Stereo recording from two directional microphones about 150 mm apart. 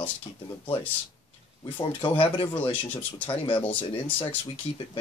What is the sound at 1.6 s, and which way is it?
Speech, 35° left (ahead or behind).